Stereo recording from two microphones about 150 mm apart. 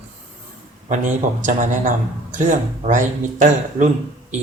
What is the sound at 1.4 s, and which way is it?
Speech, 55° right (ahead or behind).